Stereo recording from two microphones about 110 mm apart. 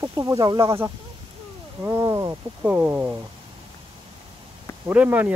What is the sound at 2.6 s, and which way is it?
Speech, 15° right (ahead or behind).